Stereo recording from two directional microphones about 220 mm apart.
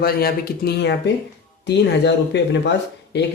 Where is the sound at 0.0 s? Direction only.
45° left (ahead or behind).